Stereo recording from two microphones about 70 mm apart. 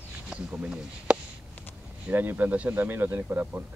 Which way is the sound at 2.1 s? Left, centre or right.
Right.